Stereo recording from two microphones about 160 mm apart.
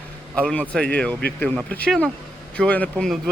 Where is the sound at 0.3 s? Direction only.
10° left (ahead or behind).